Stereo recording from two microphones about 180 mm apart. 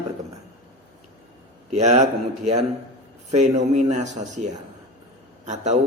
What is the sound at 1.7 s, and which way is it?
Speech, 40° right (ahead or behind).